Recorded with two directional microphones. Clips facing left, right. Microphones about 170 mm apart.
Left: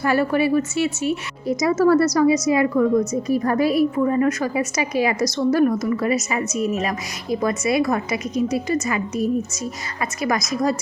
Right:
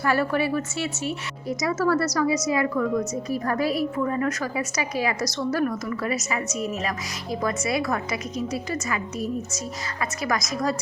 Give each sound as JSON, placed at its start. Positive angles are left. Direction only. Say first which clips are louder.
{"t": 0.0, "sound": "a woman's voice", "louder": "left 4 dB", "side_deg": 15}